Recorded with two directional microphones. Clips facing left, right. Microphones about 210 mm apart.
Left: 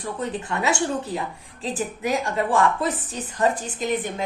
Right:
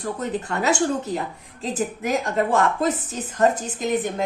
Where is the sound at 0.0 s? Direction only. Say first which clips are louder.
Right 2 dB; 40° right (ahead or behind).